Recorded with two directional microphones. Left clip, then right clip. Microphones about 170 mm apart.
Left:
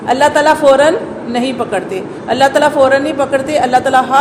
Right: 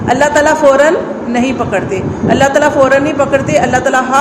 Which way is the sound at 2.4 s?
30° left (ahead or behind).